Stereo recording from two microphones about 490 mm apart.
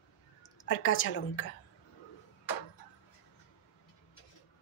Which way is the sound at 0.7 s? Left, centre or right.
Left.